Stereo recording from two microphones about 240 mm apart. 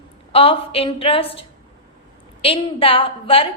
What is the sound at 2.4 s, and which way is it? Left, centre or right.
A woman's voice, left.